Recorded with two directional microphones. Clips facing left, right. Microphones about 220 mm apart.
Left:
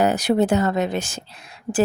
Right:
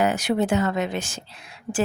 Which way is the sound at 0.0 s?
35° left (ahead or behind).